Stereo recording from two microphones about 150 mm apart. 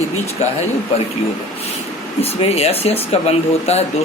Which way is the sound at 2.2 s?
45° left (ahead or behind).